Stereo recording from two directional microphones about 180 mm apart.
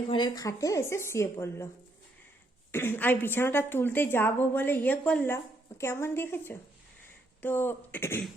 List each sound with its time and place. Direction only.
0.1 s a woman's voice: 25° left (ahead or behind)
2.7 s a woman's voice: 10° left (ahead or behind)